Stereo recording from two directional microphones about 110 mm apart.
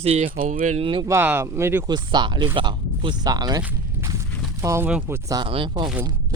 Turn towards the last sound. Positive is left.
turn(degrees=-45)  # may be behind; listen again after turning